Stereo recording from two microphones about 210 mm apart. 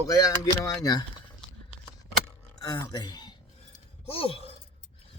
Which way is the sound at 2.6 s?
20° left (ahead or behind).